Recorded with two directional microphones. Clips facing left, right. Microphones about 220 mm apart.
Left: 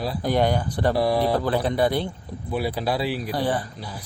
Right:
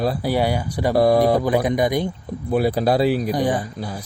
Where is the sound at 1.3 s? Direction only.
15° right (ahead or behind).